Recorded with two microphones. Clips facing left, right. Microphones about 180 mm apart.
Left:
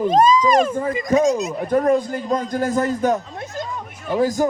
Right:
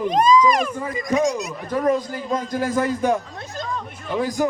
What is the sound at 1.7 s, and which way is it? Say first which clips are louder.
A man's voice: left 3 dB; 50° left (ahead or behind).